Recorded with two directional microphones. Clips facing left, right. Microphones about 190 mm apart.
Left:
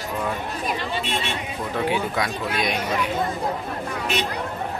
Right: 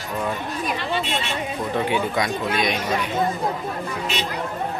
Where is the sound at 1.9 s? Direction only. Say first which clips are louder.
Right 2 dB; centre (ahead or behind).